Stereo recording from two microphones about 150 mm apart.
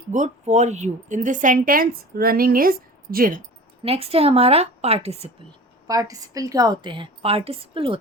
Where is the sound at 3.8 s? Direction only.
40° right (ahead or behind).